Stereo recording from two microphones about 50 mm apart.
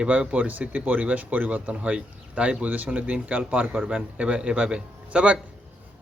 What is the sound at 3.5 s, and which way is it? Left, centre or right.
Speech, right.